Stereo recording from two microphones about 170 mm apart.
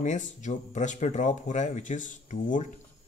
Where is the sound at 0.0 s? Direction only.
45° left (ahead or behind).